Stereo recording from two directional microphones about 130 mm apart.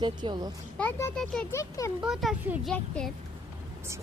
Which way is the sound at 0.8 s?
15° left (ahead or behind).